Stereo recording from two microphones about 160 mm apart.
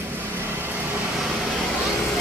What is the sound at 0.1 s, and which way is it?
Vehicle, 15° right (ahead or behind).